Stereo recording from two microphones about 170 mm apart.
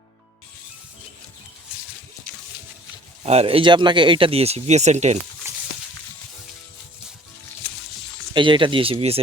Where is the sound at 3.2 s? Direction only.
35° right (ahead or behind).